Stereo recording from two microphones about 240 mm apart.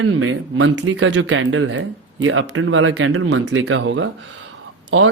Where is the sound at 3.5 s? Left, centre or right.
Right.